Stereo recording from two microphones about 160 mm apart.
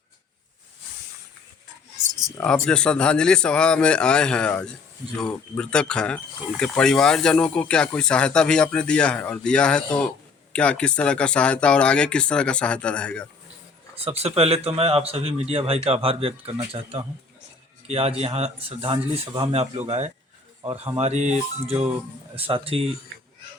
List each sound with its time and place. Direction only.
2.4 s speech: 5° left (ahead or behind)
13.9 s speech: 40° right (ahead or behind)
17.8 s speech: 40° right (ahead or behind)
22.4 s speech: 35° right (ahead or behind)